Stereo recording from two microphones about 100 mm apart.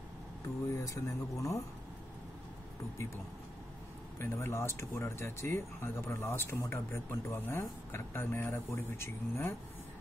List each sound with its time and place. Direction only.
0.7 s speech: 30° left (ahead or behind)
4.2 s speech: 25° left (ahead or behind)